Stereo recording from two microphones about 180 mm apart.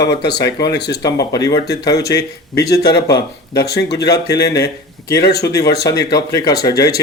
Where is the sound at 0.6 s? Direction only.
70° left (ahead or behind).